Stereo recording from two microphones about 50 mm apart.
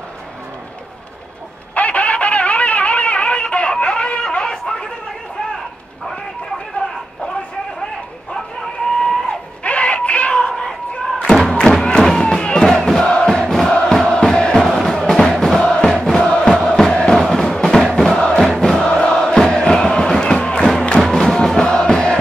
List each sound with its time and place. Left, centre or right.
1.8 s a sound: left
9.0 s screaming: left
11.3 s thump: centre
12.0 s a sound: centre
12.6 s crowd: centre
13.7 s music: centre
15.6 s music: centre
21.0 s music: centre